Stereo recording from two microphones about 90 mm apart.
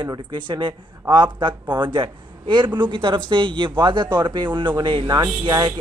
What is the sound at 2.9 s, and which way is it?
A man's voice, 70° right (ahead or behind).